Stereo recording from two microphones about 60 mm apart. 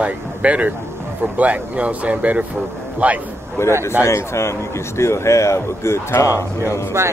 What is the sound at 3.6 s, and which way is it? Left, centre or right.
A man's voice, left.